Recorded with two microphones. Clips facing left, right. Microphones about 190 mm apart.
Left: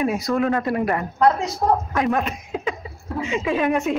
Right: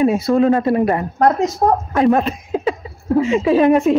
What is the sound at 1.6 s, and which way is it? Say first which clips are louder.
Speech: right 4 dB; 50° right (ahead or behind).